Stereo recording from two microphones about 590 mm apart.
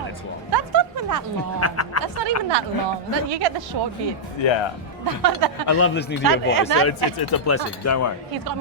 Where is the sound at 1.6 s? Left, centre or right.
Left.